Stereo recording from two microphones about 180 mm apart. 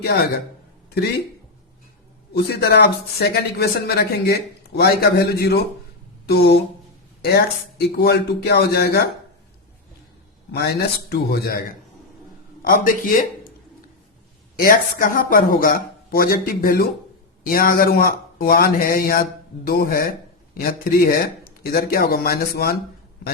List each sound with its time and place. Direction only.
2.3 s speech: 60° left (ahead or behind)
10.5 s speech: 60° left (ahead or behind)
12.6 s speech: 50° left (ahead or behind)
14.6 s speech: 50° left (ahead or behind)